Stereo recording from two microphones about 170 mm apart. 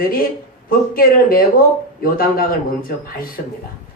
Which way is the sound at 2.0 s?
60° left (ahead or behind).